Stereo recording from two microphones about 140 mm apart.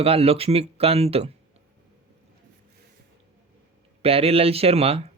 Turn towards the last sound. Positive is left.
turn(degrees=-45)  # may be behind; listen again after turning